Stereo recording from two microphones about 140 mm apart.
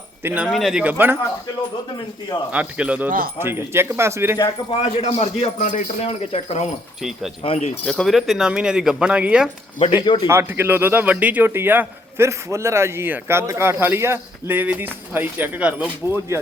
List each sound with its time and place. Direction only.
0.2 s speech: 15° right (ahead or behind)
0.4 s a man's voice: centre (ahead or behind)
2.5 s a man's voice: 10° right (ahead or behind)
3.1 s speech: 90° right
3.3 s a man's voice: 15° right (ahead or behind)
4.4 s speech: 35° left (ahead or behind)
7.9 s speech: centre (ahead or behind)
9.9 s speech: 35° left (ahead or behind)
10.2 s a man's voice: 15° right (ahead or behind)